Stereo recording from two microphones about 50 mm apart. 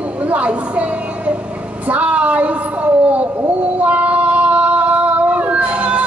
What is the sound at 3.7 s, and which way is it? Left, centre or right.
Female singing, right.